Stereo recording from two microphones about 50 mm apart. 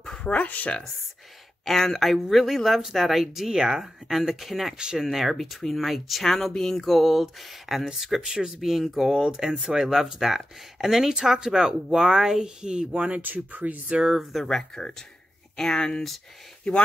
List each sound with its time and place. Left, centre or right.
0.2 s speech: left
1.6 s speech: centre; by 13.2 s right
13.2 s speech: right
14.1 s speech: centre